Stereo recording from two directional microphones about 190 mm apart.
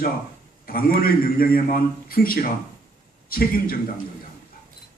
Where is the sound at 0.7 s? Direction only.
50° left (ahead or behind).